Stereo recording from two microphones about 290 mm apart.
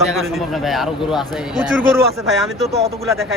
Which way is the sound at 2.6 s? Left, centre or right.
Right.